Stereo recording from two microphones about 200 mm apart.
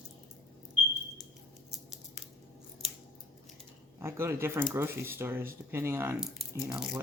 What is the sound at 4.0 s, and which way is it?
Speech, 15° right (ahead or behind).